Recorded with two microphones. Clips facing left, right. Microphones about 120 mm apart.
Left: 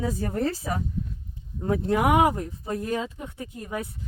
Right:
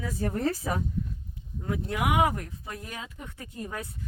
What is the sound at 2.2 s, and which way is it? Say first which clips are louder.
Speech: left 4 dB; 25° left (ahead or behind).